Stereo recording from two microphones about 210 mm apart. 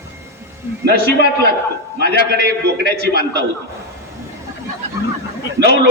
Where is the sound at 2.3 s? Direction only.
45° left (ahead or behind).